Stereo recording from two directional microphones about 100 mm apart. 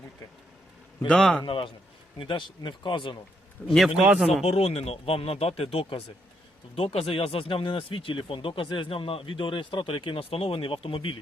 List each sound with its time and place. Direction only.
1.0 s a man's voice: 10° left (ahead or behind)
1.5 s speech: 55° left (ahead or behind)
3.7 s a man's voice: centre (ahead or behind)
4.4 s speech: 90° left; by 11.2 s 60° left (ahead or behind)